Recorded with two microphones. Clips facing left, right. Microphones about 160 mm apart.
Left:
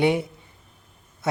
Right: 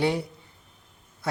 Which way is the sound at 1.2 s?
20° left (ahead or behind).